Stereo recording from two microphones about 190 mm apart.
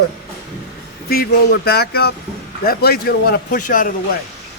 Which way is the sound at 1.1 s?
55° left (ahead or behind).